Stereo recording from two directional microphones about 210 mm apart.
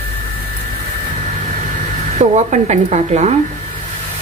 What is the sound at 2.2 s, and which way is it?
A woman's voice, 30° right (ahead or behind).